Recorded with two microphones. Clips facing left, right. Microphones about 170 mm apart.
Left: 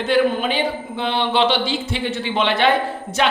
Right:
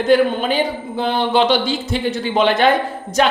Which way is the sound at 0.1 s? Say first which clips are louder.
Right 3 dB; 40° right (ahead or behind).